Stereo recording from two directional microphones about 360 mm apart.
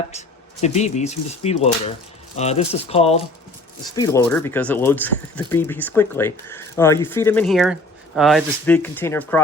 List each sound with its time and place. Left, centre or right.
0.1 s speech: centre